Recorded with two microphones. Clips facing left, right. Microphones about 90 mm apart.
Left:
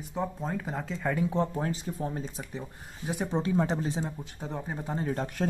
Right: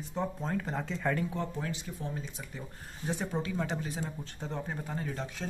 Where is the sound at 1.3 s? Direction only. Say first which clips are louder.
Left 6 dB; 35° left (ahead or behind).